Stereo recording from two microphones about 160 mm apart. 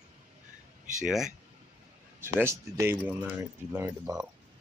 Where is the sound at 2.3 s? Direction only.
15° right (ahead or behind).